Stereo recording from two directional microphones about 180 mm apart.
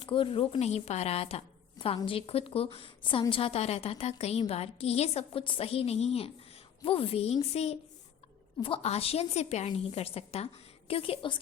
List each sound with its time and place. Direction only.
0.0 s a woman's voice: 30° left (ahead or behind)